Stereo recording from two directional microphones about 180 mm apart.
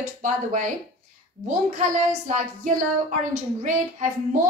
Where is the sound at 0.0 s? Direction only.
45° right (ahead or behind).